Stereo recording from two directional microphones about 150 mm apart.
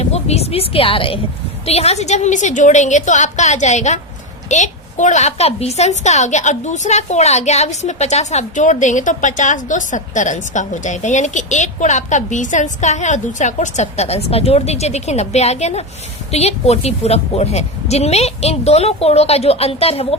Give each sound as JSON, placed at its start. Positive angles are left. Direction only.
{"t": 0.0, "sound": "a woman's voice", "side_deg": 45}